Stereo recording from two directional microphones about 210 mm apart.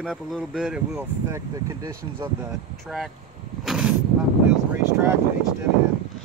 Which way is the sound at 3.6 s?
Centre (ahead or behind).